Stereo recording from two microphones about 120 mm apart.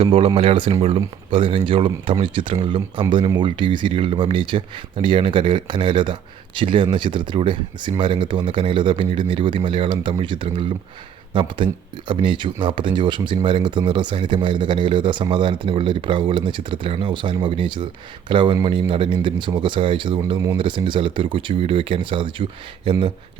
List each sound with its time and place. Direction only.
0.0 s speech: 50° right (ahead or behind)